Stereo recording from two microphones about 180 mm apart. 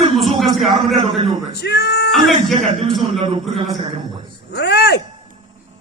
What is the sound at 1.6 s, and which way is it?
Speech, 65° left (ahead or behind).